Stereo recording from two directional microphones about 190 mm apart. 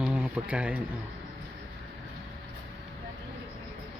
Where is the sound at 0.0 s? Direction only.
10° right (ahead or behind).